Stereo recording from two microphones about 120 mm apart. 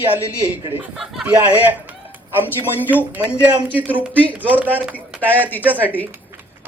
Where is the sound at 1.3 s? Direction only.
15° right (ahead or behind).